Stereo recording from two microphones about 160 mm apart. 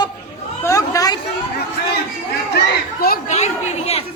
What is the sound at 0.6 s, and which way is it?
Speech, 20° left (ahead or behind).